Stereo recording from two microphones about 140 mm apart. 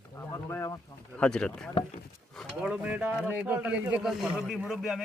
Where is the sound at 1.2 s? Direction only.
5° left (ahead or behind).